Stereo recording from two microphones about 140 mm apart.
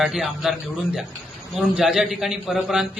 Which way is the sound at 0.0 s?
Centre (ahead or behind).